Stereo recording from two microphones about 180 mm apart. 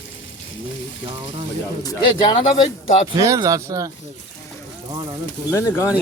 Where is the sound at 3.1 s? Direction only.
20° right (ahead or behind).